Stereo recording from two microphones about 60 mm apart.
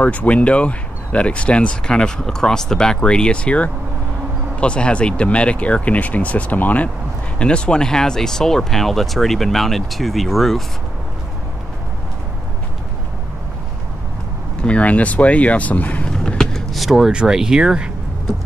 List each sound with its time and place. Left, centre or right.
0.0 s speech: left; by 10.6 s centre
14.6 s speech: left
16.3 s vehicle: centre
16.7 s speech: centre